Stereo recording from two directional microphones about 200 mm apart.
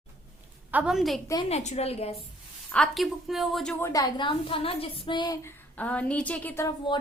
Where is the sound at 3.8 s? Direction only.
15° left (ahead or behind).